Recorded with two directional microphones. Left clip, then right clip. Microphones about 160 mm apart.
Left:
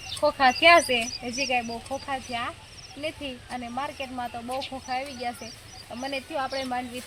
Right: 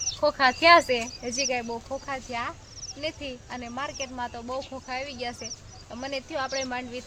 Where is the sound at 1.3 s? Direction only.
10° right (ahead or behind).